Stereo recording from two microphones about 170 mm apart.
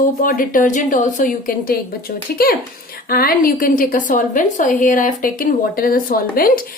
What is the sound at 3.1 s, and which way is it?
A woman's voice, 60° left (ahead or behind).